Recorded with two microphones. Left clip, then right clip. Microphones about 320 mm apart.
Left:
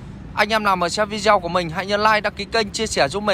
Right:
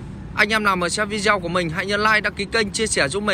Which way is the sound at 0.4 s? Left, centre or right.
Centre.